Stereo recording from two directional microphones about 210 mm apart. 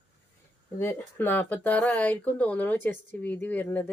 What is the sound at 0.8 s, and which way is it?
Speech, 10° left (ahead or behind).